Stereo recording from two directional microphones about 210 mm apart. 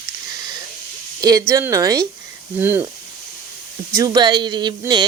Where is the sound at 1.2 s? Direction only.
15° right (ahead or behind).